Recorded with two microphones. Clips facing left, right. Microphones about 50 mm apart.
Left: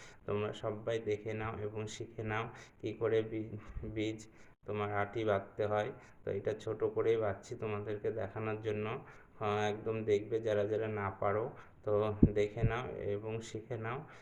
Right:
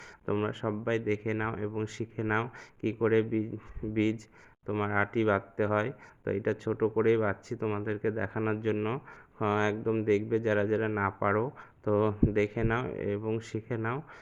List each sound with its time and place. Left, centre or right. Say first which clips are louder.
0.4 s speech: right 6 dB; right
8.5 s speech: right 7 dB; right
9.4 s speech: right 6 dB; right